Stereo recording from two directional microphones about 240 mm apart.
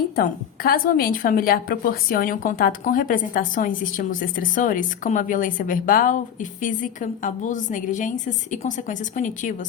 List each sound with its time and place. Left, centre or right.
0.2 s a woman's voice: left